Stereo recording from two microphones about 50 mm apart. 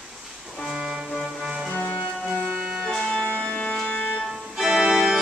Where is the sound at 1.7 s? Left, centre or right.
Left.